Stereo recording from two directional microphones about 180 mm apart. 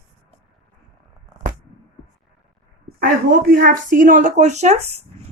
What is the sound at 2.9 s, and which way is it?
Speech, 50° right (ahead or behind).